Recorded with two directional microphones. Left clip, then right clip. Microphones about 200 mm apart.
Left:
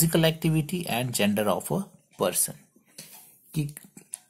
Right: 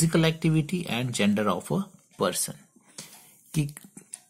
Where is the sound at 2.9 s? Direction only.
30° right (ahead or behind).